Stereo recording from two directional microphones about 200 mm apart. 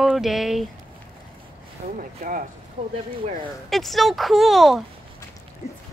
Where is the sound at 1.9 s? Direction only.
40° right (ahead or behind).